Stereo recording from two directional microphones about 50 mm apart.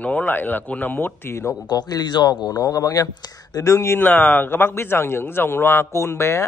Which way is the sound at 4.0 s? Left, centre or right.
Left.